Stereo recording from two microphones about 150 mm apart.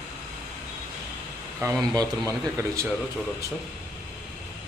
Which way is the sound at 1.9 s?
25° right (ahead or behind).